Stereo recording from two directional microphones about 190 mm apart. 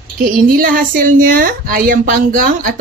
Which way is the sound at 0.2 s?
50° right (ahead or behind).